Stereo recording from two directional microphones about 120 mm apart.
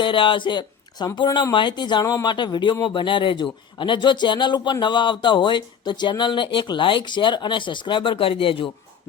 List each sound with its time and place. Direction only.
0.0 s speech: 45° left (ahead or behind)